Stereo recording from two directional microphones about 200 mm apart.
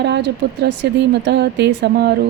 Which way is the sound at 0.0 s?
60° right (ahead or behind).